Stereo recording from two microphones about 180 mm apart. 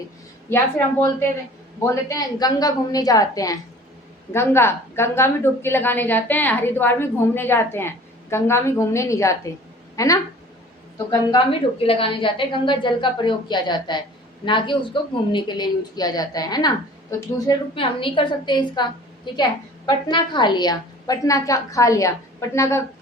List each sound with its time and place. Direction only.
0.5 s a woman's voice: 15° left (ahead or behind)